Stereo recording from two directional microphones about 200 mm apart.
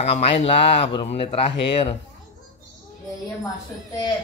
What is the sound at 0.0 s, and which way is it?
Speech, 30° left (ahead or behind).